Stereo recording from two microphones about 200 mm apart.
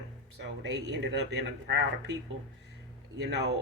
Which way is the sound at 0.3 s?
60° right (ahead or behind).